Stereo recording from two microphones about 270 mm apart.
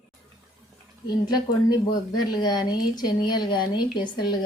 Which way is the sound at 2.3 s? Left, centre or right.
Centre.